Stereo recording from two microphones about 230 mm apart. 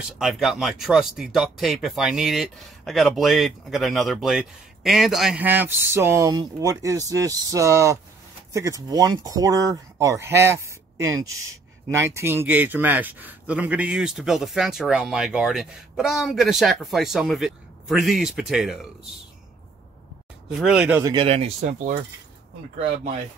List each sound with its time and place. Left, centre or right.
0.0 s speech: centre
20.4 s speech: centre
21.0 s speech: right